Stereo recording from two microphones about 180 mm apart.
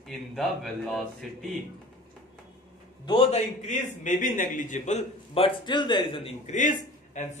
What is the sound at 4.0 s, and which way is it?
A man's voice, 45° left (ahead or behind).